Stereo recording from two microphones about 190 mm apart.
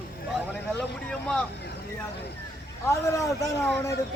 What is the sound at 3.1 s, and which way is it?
Speech, 15° left (ahead or behind).